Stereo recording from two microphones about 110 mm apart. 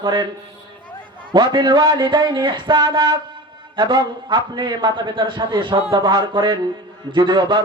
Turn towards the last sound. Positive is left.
turn(degrees=-45)  # may be behind; listen again after turning